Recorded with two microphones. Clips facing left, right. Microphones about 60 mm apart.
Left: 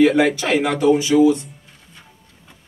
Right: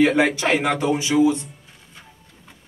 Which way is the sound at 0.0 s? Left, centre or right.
Centre.